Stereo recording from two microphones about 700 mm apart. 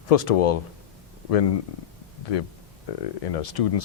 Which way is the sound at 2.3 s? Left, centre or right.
Left.